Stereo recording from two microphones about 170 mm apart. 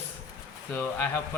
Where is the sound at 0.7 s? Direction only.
15° left (ahead or behind).